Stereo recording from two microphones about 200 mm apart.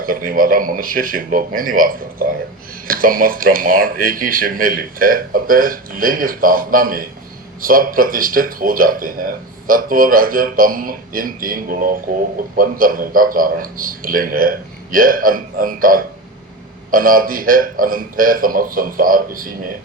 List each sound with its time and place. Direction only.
0.0 s speech: 45° right (ahead or behind)